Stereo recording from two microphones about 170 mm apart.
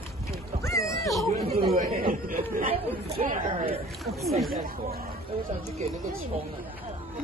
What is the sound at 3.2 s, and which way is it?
Speech, 45° right (ahead or behind).